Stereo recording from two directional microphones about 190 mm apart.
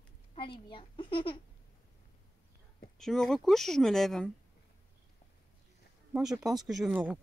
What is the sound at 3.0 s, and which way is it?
Speech, centre (ahead or behind).